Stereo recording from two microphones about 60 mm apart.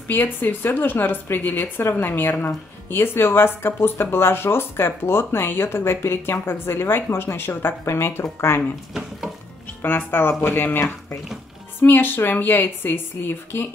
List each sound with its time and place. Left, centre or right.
0.1 s a woman's voice: left
9.8 s a woman's voice: left